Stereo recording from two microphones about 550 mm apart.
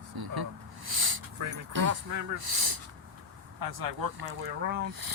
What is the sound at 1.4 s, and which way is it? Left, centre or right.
Speech, right.